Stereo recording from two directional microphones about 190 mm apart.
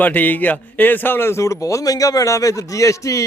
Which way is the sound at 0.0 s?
10° left (ahead or behind).